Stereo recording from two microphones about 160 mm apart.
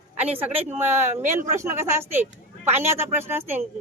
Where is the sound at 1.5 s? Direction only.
15° right (ahead or behind).